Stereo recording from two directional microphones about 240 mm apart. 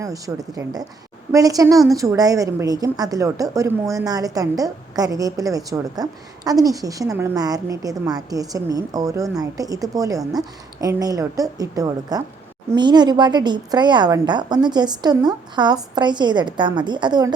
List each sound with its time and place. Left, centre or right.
0.0 s a woman's voice: centre